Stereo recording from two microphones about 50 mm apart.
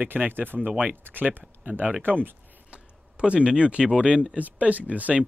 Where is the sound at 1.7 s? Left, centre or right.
Right.